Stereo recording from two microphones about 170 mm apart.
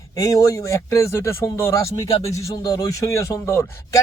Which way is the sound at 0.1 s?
20° left (ahead or behind).